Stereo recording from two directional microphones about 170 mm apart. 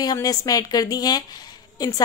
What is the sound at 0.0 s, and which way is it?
A woman's voice, 20° left (ahead or behind).